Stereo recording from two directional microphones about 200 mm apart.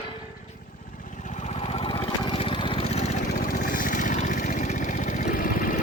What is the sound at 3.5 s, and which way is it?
Vehicle, 45° left (ahead or behind).